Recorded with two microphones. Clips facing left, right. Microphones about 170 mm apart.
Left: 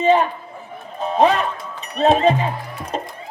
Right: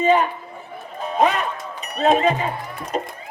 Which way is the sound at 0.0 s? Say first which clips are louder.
Left 2 dB; 30° left (ahead or behind).